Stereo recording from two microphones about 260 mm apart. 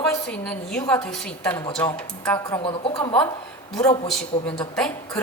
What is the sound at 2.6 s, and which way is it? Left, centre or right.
Speech, centre.